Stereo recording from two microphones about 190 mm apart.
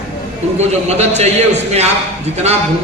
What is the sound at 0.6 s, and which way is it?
A man's voice, 35° right (ahead or behind).